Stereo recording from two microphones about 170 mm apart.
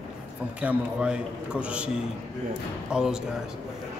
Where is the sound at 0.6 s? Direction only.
5° right (ahead or behind).